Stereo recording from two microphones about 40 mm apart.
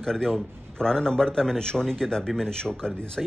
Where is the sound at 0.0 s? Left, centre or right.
Centre.